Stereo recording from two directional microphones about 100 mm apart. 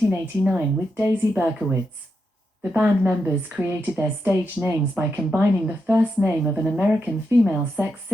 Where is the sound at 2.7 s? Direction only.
15° right (ahead or behind).